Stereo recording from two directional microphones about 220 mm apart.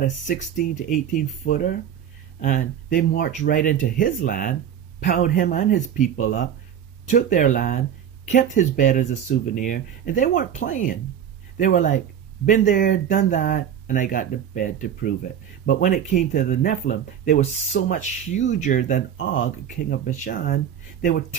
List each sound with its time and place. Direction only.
0.6 s speech: 35° left (ahead or behind)